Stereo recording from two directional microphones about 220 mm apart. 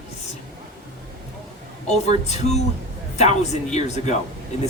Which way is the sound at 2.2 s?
30° left (ahead or behind).